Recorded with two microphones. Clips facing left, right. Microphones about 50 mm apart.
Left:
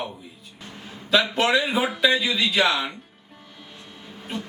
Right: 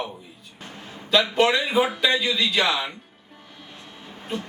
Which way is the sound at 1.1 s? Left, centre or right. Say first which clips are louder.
Right 1 dB; centre.